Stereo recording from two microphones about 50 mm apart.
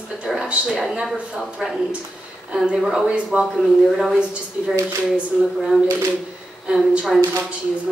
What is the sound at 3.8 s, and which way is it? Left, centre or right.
Speech, centre.